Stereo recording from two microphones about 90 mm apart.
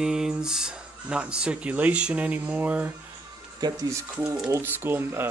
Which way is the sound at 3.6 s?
50° right (ahead or behind).